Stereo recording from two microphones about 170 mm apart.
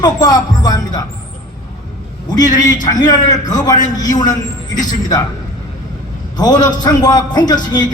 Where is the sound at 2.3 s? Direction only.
25° left (ahead or behind).